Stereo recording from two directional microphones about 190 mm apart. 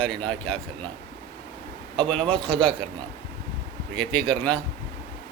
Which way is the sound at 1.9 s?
5° left (ahead or behind).